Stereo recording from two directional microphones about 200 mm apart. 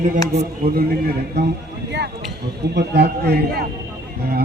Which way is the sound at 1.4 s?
60° right (ahead or behind).